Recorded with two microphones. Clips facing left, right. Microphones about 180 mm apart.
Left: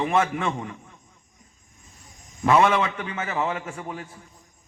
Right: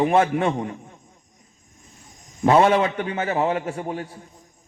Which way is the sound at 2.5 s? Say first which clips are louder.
Right 3 dB; 30° right (ahead or behind).